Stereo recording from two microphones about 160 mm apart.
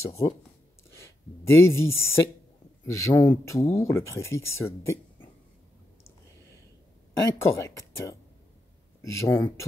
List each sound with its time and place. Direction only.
0.0 s speech: 20° left (ahead or behind)
7.2 s speech: 15° left (ahead or behind)